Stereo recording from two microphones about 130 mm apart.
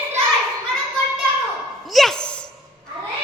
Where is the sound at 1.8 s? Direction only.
Centre (ahead or behind).